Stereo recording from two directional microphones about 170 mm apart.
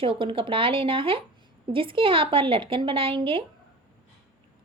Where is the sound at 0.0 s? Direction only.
30° right (ahead or behind).